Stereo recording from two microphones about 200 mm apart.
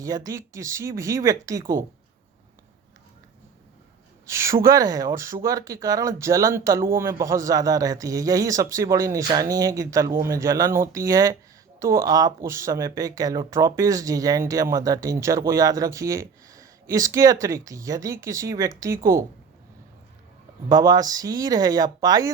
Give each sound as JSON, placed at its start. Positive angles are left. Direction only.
{"t": 0.0, "sound": "speech", "side_deg": -15}
{"t": 4.3, "sound": "speech", "side_deg": -15}
{"t": 20.7, "sound": "speech", "side_deg": -20}